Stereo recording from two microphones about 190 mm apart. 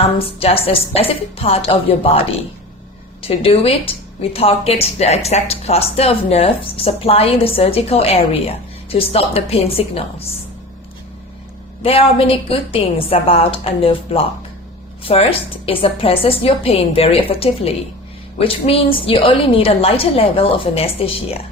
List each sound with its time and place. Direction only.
0.2 s a woman's voice: 30° left (ahead or behind)
11.8 s a woman's voice: 30° left (ahead or behind)